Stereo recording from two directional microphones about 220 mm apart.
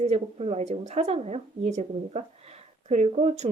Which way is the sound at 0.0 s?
30° right (ahead or behind).